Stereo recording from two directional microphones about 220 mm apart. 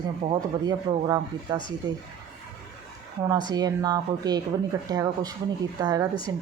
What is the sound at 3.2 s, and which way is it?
Speech, 20° right (ahead or behind).